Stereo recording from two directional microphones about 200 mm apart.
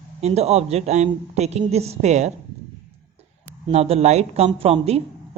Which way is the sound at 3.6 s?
30° right (ahead or behind).